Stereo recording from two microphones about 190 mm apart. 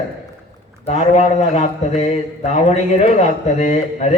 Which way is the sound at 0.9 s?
35° left (ahead or behind).